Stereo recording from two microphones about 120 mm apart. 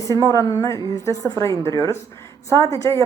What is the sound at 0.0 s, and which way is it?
A woman's voice, 25° left (ahead or behind).